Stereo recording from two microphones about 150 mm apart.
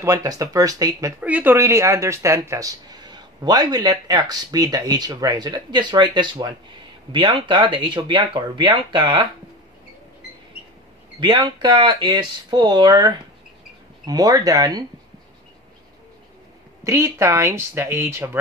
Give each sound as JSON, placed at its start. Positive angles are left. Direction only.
{"t": 0.0, "sound": "speech", "side_deg": -25}
{"t": 1.2, "sound": "speech", "side_deg": -10}
{"t": 11.1, "sound": "speech", "side_deg": -30}
{"t": 16.8, "sound": "speech", "side_deg": -20}